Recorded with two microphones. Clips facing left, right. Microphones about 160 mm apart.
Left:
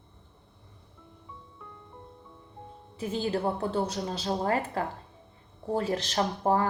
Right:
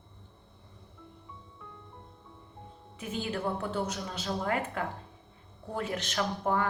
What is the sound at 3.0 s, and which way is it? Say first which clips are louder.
A woman's voice: left 5 dB; 30° left (ahead or behind).